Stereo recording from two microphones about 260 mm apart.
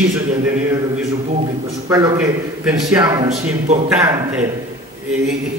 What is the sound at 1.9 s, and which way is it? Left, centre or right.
A man's voice, centre.